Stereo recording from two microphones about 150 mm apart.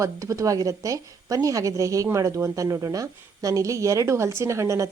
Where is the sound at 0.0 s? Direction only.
20° right (ahead or behind).